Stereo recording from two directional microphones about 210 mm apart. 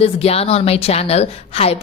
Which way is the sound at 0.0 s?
30° left (ahead or behind).